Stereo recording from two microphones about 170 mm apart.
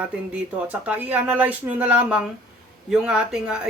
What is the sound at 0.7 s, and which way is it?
Speech, 10° right (ahead or behind).